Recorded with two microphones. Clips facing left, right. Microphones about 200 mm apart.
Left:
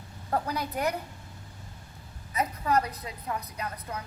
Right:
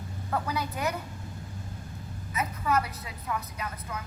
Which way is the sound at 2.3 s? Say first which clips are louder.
Left 2 dB; 35° left (ahead or behind).